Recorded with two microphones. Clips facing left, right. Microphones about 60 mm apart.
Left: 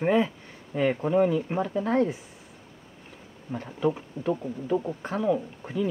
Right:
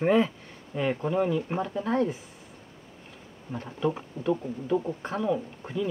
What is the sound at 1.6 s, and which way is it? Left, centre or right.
Speech, left.